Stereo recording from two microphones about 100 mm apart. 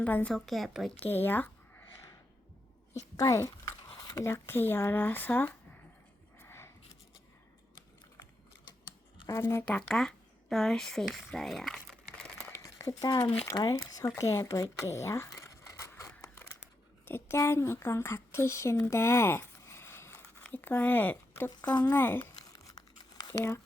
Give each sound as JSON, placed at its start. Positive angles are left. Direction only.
{"t": 0.0, "sound": "a woman's voice", "side_deg": 15}
{"t": 0.3, "sound": "a woman's voice", "side_deg": 0}
{"t": 0.9, "sound": "speech", "side_deg": 20}
{"t": 3.2, "sound": "speech", "side_deg": 30}
{"t": 6.4, "sound": "a sound", "side_deg": 25}
{"t": 9.2, "sound": "speech", "side_deg": 25}
{"t": 9.6, "sound": "speech", "side_deg": 10}
{"t": 12.5, "sound": "a sound", "side_deg": 35}
{"t": 13.5, "sound": "speech", "side_deg": 35}
{"t": 15.4, "sound": "scissors", "side_deg": 30}
{"t": 17.1, "sound": "speech", "side_deg": 25}
{"t": 21.6, "sound": "speech", "side_deg": 40}
{"t": 21.9, "sound": "speech", "side_deg": 25}
{"t": 22.5, "sound": "tearing", "side_deg": 40}